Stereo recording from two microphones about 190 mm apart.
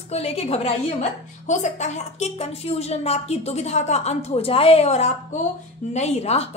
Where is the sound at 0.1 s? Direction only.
35° left (ahead or behind).